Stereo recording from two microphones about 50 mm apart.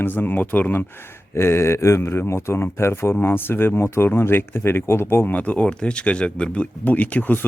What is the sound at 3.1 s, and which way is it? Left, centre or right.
Speech, left.